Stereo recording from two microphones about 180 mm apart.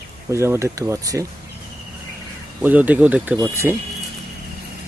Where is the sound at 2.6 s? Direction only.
10° right (ahead or behind).